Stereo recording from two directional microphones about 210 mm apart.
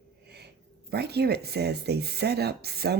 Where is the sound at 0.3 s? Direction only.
50° right (ahead or behind).